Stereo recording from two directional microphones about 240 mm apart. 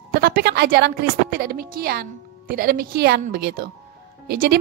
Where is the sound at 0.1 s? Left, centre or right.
Right.